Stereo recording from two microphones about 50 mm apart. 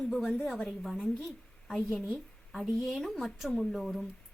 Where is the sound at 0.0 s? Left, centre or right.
Centre.